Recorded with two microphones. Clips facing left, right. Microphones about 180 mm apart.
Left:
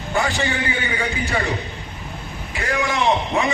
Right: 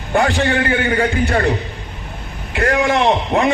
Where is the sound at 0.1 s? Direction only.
60° right (ahead or behind).